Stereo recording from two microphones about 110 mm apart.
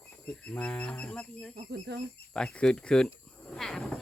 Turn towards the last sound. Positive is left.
turn(degrees=5)  # may be behind; listen again after turning